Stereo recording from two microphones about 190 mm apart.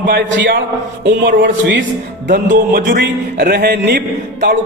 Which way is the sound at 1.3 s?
75° right (ahead or behind).